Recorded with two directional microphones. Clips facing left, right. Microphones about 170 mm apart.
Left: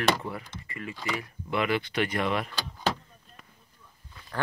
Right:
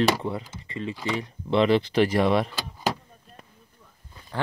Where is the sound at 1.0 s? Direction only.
30° right (ahead or behind).